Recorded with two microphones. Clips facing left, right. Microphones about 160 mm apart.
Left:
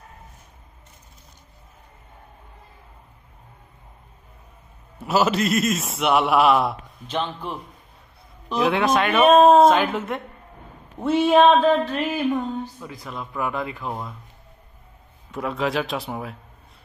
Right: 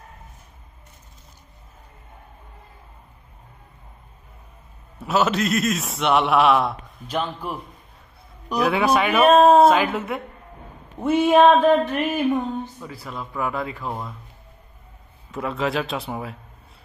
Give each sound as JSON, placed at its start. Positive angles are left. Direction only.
{"t": 4.9, "sound": "a man's voice", "side_deg": 0}
{"t": 8.5, "sound": "a sound", "side_deg": -5}
{"t": 12.8, "sound": "a man's voice", "side_deg": 0}
{"t": 15.3, "sound": "a man's voice", "side_deg": 0}